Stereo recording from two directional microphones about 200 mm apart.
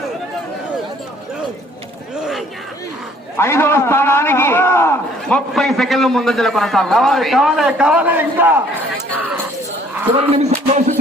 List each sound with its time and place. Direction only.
3.3 s a man's voice: 10° left (ahead or behind)
5.5 s a man's voice: centre (ahead or behind)
10.3 s music: 35° right (ahead or behind)